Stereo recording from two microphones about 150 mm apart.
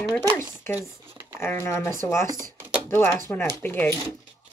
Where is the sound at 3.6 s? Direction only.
15° left (ahead or behind).